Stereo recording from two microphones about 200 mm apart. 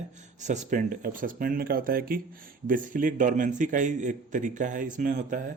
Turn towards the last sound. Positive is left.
turn(degrees=-40)  # may be behind; listen again after turning